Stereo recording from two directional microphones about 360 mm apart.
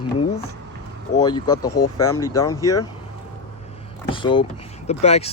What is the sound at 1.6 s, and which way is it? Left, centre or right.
Speech, left.